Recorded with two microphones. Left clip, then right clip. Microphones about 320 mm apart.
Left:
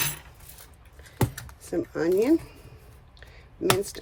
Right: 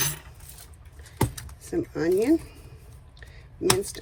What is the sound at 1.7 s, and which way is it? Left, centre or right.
Speech, left.